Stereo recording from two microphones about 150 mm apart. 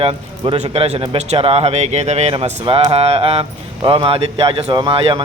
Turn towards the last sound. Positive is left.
turn(degrees=-35)  # may be behind; listen again after turning